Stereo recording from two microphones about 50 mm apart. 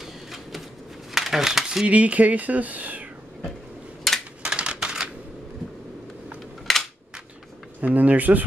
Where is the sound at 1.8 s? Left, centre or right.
Right.